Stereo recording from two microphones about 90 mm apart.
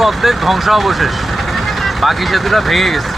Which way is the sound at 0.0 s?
Centre (ahead or behind).